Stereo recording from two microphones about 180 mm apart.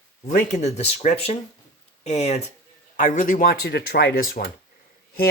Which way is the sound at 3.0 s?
45° left (ahead or behind).